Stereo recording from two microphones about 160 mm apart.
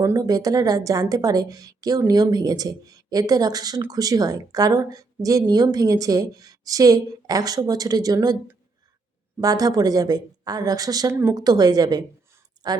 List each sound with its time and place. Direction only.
0.0 s a woman's voice: 20° right (ahead or behind)
9.4 s a woman's voice: 25° right (ahead or behind)